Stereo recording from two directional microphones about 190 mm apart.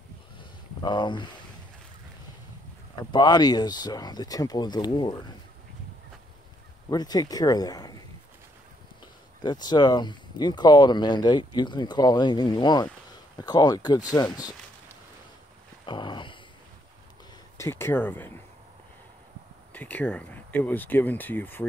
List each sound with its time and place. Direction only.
0.4 s a sound: 25° left (ahead or behind)
3.0 s speech: 20° left (ahead or behind)
6.9 s speech: 20° left (ahead or behind)
9.4 s speech: 20° left (ahead or behind)
15.8 s a sound: 25° left (ahead or behind)
17.6 s speech: 15° left (ahead or behind)
19.7 s speech: 10° left (ahead or behind)